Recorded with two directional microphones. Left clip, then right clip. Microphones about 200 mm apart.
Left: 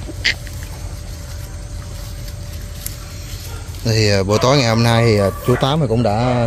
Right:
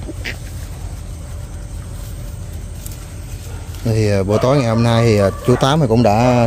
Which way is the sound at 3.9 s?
5° right (ahead or behind).